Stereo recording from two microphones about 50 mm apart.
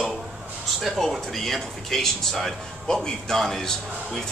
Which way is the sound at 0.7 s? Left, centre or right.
Centre.